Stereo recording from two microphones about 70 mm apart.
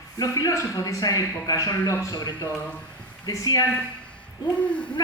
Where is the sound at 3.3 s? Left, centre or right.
Left.